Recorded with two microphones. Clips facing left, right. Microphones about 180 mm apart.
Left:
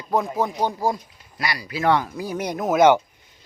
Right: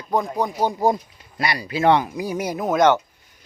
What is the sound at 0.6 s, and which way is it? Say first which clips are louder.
Speech: right 3 dB; 15° right (ahead or behind).